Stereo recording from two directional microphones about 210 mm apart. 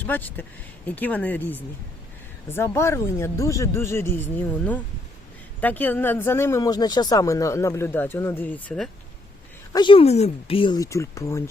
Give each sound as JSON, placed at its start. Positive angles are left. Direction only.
{"t": 0.0, "sound": "speech", "side_deg": 10}
{"t": 9.7, "sound": "speech", "side_deg": 25}